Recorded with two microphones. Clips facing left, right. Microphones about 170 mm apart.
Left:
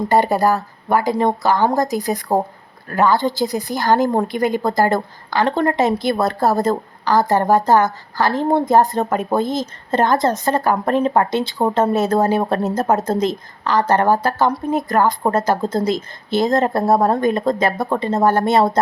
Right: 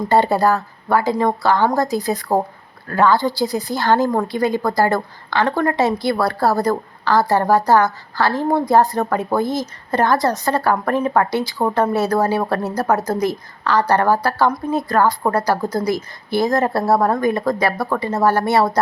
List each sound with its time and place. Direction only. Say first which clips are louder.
0.1 s a woman's voice: right 1 dB; 15° left (ahead or behind)